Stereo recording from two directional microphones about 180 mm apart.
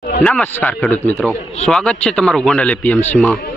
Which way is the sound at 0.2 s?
10° left (ahead or behind).